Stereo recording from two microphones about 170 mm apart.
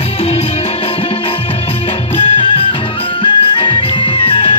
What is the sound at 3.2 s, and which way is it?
Music, 30° left (ahead or behind).